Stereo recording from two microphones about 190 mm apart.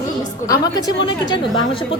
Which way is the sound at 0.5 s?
20° left (ahead or behind).